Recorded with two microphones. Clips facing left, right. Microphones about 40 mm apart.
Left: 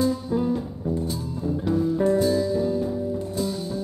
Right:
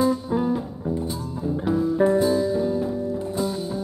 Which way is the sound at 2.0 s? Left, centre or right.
Right.